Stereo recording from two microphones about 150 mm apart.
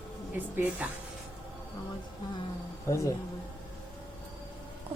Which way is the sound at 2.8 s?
20° left (ahead or behind).